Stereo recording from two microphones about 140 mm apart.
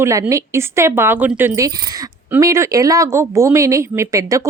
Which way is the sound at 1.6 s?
25° right (ahead or behind).